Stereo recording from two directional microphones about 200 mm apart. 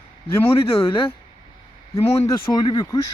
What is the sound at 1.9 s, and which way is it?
Speech, 15° left (ahead or behind).